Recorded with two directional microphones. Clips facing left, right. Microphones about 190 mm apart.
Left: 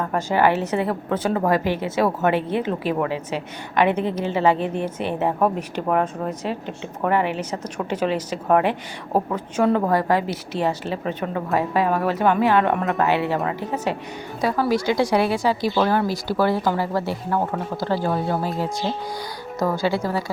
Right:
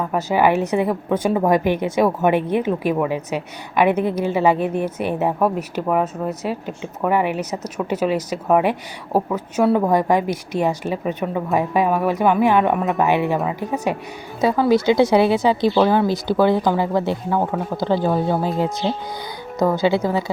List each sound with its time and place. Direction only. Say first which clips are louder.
0.0 s a woman's voice: right 2 dB; 10° right (ahead or behind)
17.2 s a woman's voice: right 3 dB; 10° right (ahead or behind)
17.7 s speech: right 4 dB; 20° right (ahead or behind)
19.5 s speech: right 4 dB; 20° right (ahead or behind)